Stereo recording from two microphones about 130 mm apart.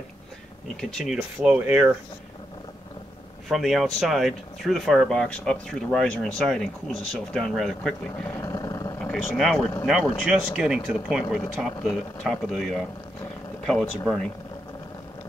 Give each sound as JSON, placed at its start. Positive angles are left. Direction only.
{"t": 0.7, "sound": "speech", "side_deg": 5}
{"t": 3.4, "sound": "speech", "side_deg": 0}
{"t": 8.4, "sound": "vehicle", "side_deg": 25}
{"t": 8.9, "sound": "vehicle", "side_deg": 10}
{"t": 9.4, "sound": "speech", "side_deg": 5}